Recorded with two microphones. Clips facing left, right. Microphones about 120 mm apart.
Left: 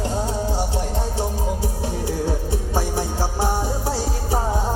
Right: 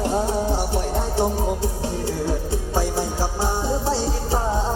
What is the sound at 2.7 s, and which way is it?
Music, 15° left (ahead or behind).